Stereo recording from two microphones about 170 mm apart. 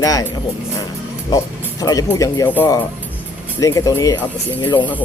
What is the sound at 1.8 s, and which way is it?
Speech, 20° left (ahead or behind).